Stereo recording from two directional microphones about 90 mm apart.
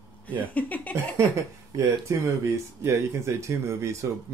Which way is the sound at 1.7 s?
35° right (ahead or behind).